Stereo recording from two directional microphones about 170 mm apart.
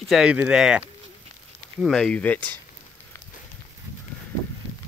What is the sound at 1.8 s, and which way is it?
Speech, 5° left (ahead or behind).